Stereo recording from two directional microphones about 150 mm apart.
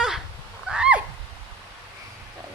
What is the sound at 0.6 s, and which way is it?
Neigh, 5° right (ahead or behind).